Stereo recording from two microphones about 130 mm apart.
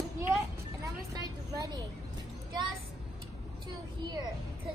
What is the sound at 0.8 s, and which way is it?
Vehicle, 30° right (ahead or behind).